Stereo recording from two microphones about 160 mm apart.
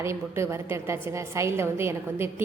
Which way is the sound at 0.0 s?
15° right (ahead or behind).